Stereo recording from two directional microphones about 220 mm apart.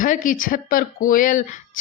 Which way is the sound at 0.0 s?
35° left (ahead or behind).